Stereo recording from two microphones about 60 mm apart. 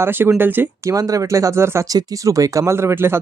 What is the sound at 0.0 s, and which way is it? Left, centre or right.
Speech, right.